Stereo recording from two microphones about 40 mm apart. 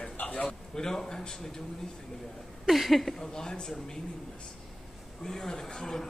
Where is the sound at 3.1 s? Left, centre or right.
Centre.